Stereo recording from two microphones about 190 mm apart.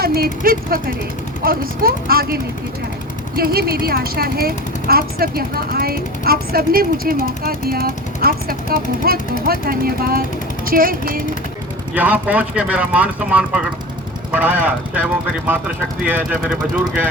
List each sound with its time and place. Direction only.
0.0 s a woman's voice: 55° right (ahead or behind)
11.9 s speech: 10° right (ahead or behind)
16.0 s speech: 10° right (ahead or behind)